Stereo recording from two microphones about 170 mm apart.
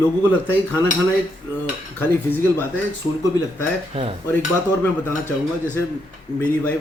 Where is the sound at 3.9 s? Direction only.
35° right (ahead or behind).